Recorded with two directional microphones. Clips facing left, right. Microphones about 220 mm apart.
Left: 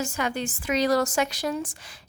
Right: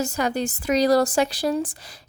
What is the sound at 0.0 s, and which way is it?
Speech, 40° right (ahead or behind).